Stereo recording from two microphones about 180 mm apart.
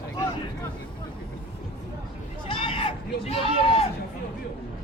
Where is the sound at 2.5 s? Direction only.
30° left (ahead or behind).